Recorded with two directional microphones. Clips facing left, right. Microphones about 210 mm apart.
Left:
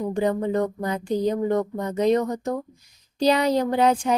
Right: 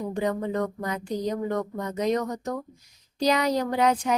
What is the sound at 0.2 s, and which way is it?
A woman's voice, 30° left (ahead or behind).